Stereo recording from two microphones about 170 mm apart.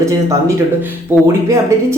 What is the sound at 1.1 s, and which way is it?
Speech, 15° right (ahead or behind).